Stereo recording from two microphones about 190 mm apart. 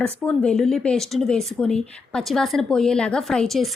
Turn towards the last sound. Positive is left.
turn(degrees=0)  # may be behind; listen again after turning